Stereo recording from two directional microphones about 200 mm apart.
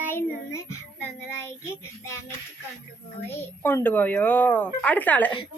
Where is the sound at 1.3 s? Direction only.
10° left (ahead or behind).